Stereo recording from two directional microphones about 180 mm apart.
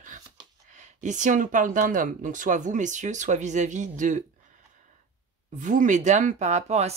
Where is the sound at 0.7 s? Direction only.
45° right (ahead or behind).